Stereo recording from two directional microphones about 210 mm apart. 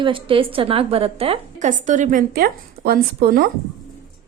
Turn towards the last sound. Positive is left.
turn(degrees=-45)  # may be behind; listen again after turning